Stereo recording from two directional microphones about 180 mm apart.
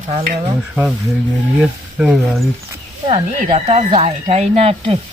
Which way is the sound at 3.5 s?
40° right (ahead or behind).